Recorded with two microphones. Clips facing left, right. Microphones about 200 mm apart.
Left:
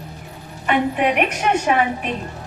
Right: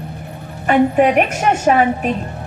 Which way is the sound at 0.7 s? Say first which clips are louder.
Right 6 dB; 40° right (ahead or behind).